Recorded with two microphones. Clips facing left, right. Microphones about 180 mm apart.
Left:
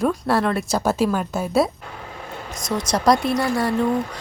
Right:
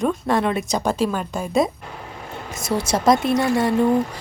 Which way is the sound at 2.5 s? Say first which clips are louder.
Right 2 dB; 25° right (ahead or behind).